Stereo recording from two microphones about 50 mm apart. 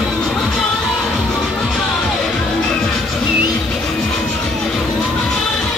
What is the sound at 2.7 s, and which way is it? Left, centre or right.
Music, centre.